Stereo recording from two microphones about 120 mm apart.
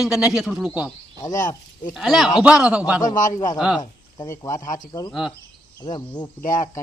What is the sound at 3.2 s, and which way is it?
Speech, 90° left.